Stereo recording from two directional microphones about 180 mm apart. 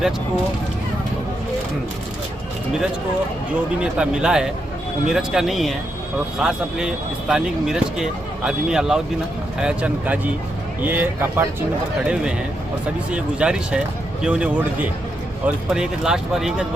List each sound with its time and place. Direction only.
3.9 s a man's voice: 5° right (ahead or behind)